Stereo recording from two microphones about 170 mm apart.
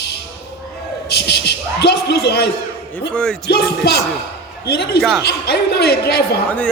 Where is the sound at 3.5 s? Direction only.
70° left (ahead or behind).